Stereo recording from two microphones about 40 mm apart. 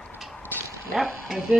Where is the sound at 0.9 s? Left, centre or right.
Centre.